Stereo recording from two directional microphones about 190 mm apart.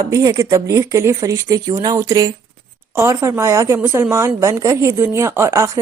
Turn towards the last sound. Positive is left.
turn(degrees=-15)  # may be behind; listen again after turning